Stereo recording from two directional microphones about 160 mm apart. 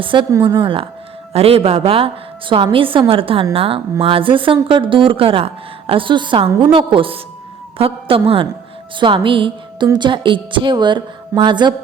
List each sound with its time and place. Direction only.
0.0 s a woman's voice: 30° right (ahead or behind)